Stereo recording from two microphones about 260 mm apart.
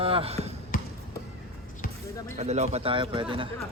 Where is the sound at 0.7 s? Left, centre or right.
Left.